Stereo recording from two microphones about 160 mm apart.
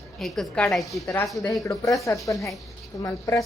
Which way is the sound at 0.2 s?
Centre (ahead or behind).